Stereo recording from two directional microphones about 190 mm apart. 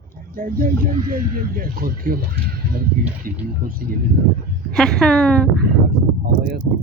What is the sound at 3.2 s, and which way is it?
Speech, 50° right (ahead or behind).